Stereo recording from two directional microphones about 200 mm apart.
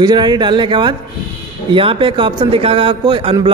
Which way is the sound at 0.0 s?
20° right (ahead or behind).